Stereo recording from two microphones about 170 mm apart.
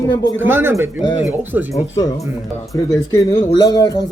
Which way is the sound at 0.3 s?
10° right (ahead or behind).